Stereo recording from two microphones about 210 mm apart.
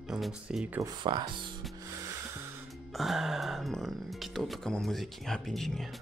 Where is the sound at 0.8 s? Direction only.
20° right (ahead or behind).